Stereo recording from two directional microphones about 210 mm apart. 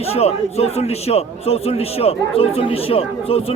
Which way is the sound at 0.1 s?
30° left (ahead or behind).